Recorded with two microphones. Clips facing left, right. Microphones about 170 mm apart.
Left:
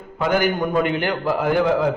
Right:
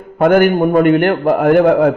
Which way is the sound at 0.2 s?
55° right (ahead or behind).